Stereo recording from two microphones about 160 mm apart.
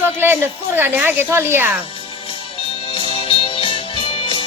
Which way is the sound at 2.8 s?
35° left (ahead or behind).